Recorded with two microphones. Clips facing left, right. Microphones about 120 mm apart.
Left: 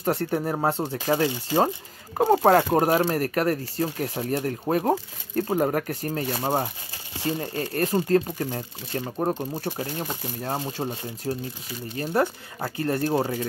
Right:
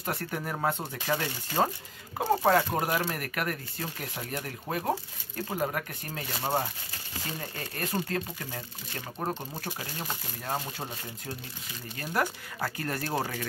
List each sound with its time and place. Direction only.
0.0 s speech: 35° left (ahead or behind)
2.4 s speech: 45° left (ahead or behind)
7.2 s speech: 30° left (ahead or behind)